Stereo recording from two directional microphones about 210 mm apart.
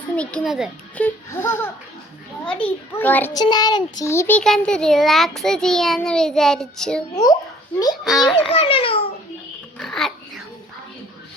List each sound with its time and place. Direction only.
0.2 s a child's voice: 5° left (ahead or behind)
3.3 s a child's voice: 20° left (ahead or behind); by 7.0 s centre (ahead or behind)
7.1 s a child's voice: 15° left (ahead or behind)
8.0 s a child's voice: centre (ahead or behind)
8.4 s a child's voice: 25° left (ahead or behind)
9.7 s dog: centre (ahead or behind)